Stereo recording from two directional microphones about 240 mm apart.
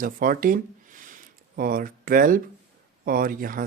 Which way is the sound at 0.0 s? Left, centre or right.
Right.